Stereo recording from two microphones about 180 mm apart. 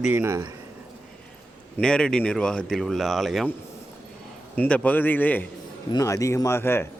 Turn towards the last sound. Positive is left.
turn(degrees=10)  # may be behind; listen again after turning